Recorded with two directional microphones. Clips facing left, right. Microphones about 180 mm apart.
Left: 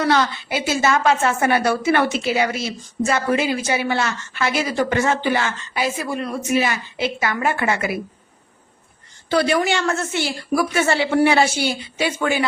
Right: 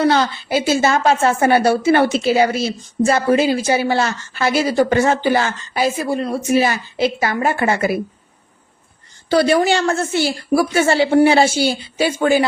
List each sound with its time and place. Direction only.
0.0 s a woman's voice: 30° right (ahead or behind)
9.3 s a woman's voice: 35° right (ahead or behind)